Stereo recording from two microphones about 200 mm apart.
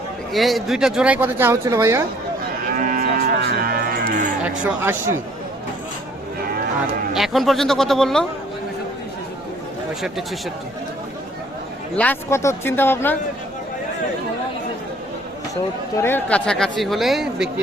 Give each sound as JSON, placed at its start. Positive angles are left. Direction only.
{"t": 0.3, "sound": "speech", "side_deg": 0}
{"t": 2.7, "sound": "cattle", "side_deg": -45}
{"t": 4.4, "sound": "speech", "side_deg": -10}
{"t": 7.1, "sound": "speech", "side_deg": 0}
{"t": 11.9, "sound": "speech", "side_deg": 10}
{"t": 16.0, "sound": "speech", "side_deg": 10}